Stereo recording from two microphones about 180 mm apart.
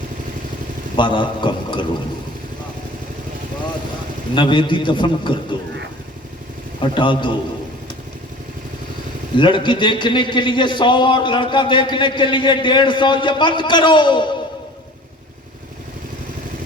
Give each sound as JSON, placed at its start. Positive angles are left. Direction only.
{"t": 0.9, "sound": "a man's voice", "side_deg": 25}
{"t": 4.4, "sound": "a man's voice", "side_deg": 25}
{"t": 6.7, "sound": "a man's voice", "side_deg": 25}
{"t": 9.4, "sound": "a man's voice", "side_deg": 25}